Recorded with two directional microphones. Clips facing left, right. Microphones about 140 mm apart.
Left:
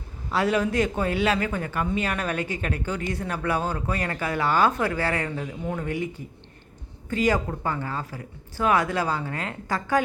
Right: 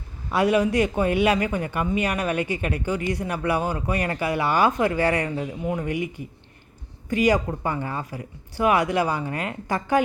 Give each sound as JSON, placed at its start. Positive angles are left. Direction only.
{"t": 0.3, "sound": "speech", "side_deg": -15}